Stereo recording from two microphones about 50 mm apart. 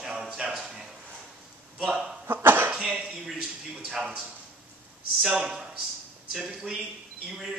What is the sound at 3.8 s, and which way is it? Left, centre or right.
Speech, centre.